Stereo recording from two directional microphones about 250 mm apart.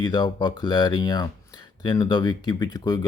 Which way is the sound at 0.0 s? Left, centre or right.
Centre.